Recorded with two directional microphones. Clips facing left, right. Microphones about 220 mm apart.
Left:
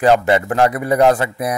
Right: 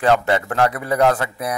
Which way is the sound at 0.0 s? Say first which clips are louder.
Left 4 dB; 15° left (ahead or behind).